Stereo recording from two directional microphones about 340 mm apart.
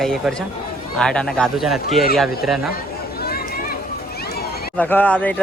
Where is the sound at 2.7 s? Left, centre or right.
Left.